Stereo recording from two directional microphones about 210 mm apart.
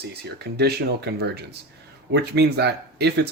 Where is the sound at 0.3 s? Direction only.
50° right (ahead or behind).